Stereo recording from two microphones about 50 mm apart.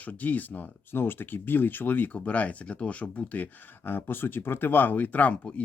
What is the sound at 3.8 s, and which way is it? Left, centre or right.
Speech, left.